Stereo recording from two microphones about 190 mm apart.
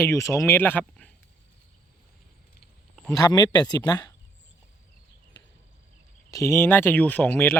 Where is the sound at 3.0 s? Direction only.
20° left (ahead or behind).